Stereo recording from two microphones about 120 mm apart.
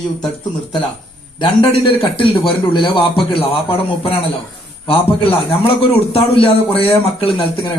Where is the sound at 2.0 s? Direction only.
45° left (ahead or behind).